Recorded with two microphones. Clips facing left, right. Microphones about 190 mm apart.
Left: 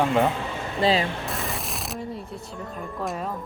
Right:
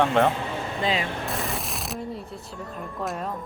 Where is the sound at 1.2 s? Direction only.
Centre (ahead or behind).